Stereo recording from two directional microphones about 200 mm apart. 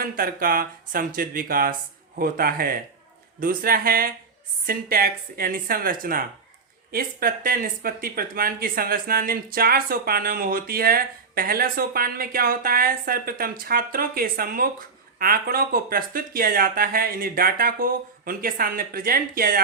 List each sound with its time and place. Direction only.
0.0 s speech: 45° right (ahead or behind)